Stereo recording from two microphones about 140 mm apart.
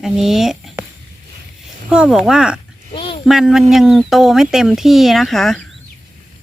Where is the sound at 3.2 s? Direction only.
5° right (ahead or behind).